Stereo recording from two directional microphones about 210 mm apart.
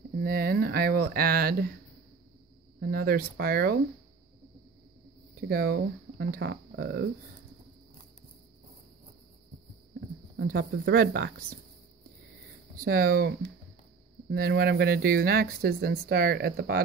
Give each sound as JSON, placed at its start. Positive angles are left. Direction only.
{"t": 0.2, "sound": "speech", "side_deg": -45}
{"t": 2.8, "sound": "speech", "side_deg": -45}
{"t": 5.4, "sound": "speech", "side_deg": -45}
{"t": 9.9, "sound": "speech", "side_deg": -45}
{"t": 12.8, "sound": "speech", "side_deg": -45}
{"t": 14.3, "sound": "speech", "side_deg": -45}